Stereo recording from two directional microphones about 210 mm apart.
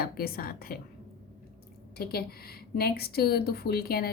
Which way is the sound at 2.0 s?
45° left (ahead or behind).